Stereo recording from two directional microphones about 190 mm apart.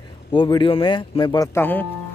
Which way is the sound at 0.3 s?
25° left (ahead or behind).